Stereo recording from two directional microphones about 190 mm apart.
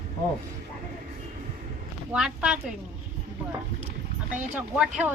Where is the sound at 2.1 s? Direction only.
5° right (ahead or behind).